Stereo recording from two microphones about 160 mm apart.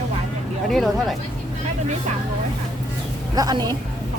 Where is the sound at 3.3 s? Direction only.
25° right (ahead or behind).